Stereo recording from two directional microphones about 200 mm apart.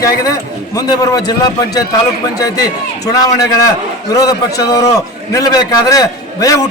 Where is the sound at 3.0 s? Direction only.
15° left (ahead or behind).